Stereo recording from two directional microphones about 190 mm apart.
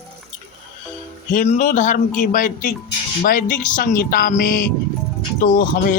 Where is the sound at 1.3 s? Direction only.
45° left (ahead or behind).